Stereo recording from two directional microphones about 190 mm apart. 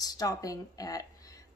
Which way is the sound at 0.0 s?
20° left (ahead or behind).